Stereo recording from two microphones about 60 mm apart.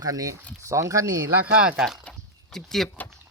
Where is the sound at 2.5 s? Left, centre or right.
Centre.